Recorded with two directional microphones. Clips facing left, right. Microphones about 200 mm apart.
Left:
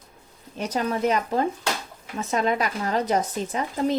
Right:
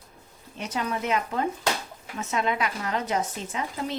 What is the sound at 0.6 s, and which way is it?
A woman's voice, 40° left (ahead or behind).